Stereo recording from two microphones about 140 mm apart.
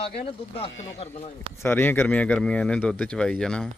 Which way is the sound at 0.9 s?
50° left (ahead or behind).